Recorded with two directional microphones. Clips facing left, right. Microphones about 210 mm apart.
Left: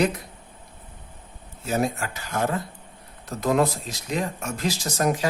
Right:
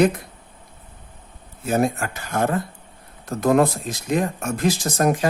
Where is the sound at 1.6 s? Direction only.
50° right (ahead or behind).